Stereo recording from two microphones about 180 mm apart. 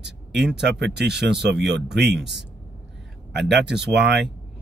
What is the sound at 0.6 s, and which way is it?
Speech, 70° right (ahead or behind).